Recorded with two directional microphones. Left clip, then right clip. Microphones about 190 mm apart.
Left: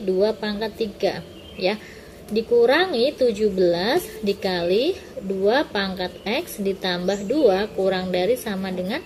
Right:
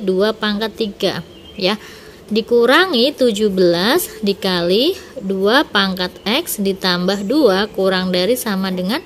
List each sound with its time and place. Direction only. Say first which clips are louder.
0.2 s a woman's voice: right 5 dB; 50° right (ahead or behind)